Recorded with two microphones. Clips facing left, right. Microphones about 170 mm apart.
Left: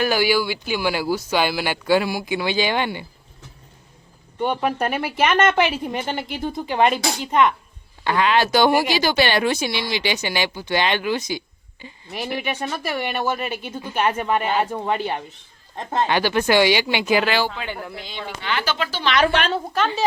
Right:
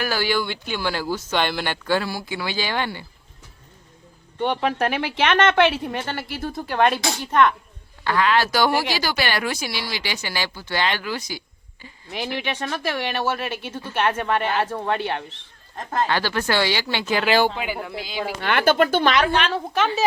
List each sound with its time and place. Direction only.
0.0 s speech: 15° left (ahead or behind)
4.4 s speech: 5° left (ahead or behind)
12.1 s speech: 5° left (ahead or behind)
15.9 s speech: 20° left (ahead or behind)
17.7 s speech: 5° right (ahead or behind)
18.3 s speech: 55° right (ahead or behind)
19.5 s speech: centre (ahead or behind)